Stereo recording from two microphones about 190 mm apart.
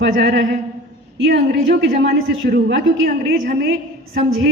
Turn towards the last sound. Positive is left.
turn(degrees=-60)  # may be behind; listen again after turning